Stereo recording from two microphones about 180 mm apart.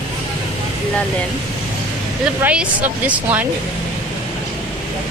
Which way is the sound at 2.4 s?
10° right (ahead or behind).